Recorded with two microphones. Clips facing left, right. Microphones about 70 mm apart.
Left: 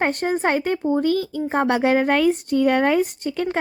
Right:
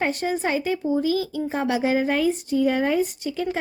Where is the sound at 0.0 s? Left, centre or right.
Left.